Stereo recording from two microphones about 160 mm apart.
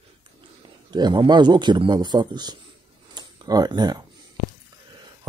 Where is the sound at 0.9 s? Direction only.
25° right (ahead or behind).